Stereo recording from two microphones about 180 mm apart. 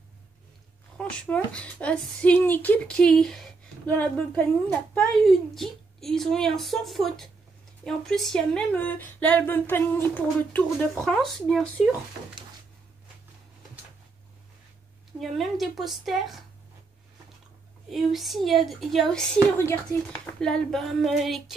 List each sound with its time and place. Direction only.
0.9 s speech: 5° left (ahead or behind)
15.1 s speech: centre (ahead or behind)
17.8 s speech: centre (ahead or behind)